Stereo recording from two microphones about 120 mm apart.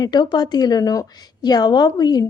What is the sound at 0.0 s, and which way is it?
Speech, 35° left (ahead or behind).